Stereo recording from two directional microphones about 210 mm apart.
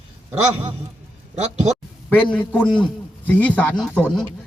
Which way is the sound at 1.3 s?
30° right (ahead or behind).